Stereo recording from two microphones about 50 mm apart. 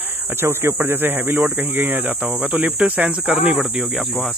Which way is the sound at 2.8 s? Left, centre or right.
Right.